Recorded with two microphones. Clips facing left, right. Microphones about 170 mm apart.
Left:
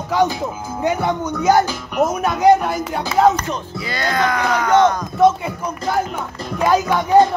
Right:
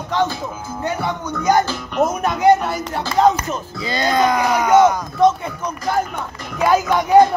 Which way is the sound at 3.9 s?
20° right (ahead or behind).